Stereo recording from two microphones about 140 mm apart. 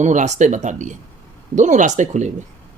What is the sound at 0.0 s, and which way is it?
Speech, 60° right (ahead or behind).